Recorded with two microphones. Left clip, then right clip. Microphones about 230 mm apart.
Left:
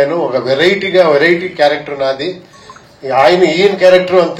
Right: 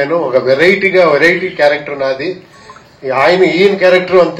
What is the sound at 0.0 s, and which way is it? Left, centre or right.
Speech, left.